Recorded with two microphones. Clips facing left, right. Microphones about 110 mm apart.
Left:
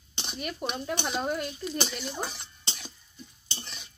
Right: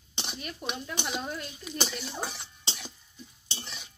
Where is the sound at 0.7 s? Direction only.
45° left (ahead or behind).